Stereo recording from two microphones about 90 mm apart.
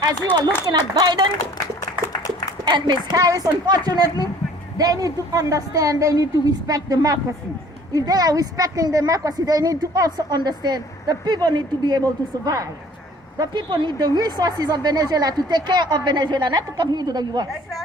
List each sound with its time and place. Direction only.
0.6 s a woman's voice: 50° right (ahead or behind)
1.4 s a sound: 45° left (ahead or behind)
2.6 s speech: 55° right (ahead or behind)
3.2 s a woman's voice: 40° right (ahead or behind)
13.4 s speech: 55° right (ahead or behind)
14.2 s a woman's voice: 45° right (ahead or behind)